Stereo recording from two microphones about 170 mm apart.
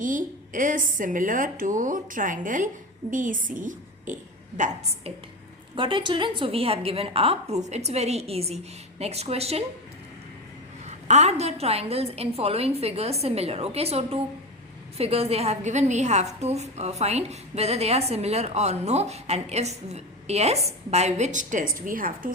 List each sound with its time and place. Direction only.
0.0 s a woman's voice: 50° right (ahead or behind)
5.7 s a woman's voice: 30° right (ahead or behind)
10.8 s a woman's voice: 40° right (ahead or behind)